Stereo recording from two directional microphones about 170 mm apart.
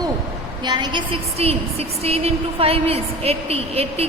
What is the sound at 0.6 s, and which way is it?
A woman's voice, 25° right (ahead or behind).